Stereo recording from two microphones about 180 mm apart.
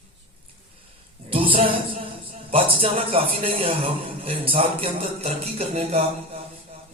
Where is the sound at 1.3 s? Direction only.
30° right (ahead or behind).